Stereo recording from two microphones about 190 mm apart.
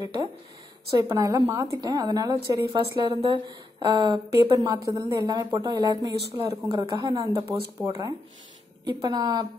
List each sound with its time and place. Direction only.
0.0 s a woman's voice: 20° right (ahead or behind)